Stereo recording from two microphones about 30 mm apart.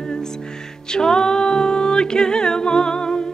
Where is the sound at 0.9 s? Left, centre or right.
Left.